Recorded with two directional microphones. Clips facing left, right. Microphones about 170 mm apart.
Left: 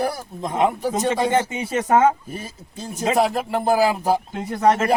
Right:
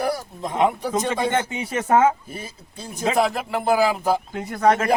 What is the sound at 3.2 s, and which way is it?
Speech, 40° left (ahead or behind).